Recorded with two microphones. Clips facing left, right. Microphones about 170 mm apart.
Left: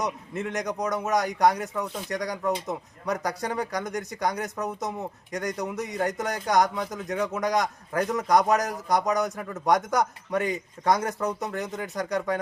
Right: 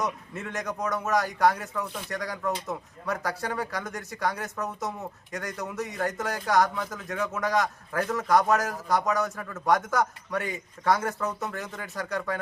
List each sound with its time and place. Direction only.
0.5 s speech: 15° left (ahead or behind)